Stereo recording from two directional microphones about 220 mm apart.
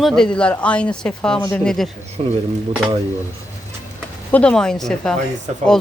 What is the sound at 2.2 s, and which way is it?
Speech, 25° right (ahead or behind).